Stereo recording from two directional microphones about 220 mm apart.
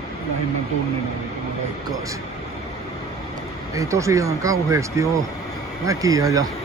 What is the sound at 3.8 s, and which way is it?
Speech, 15° right (ahead or behind).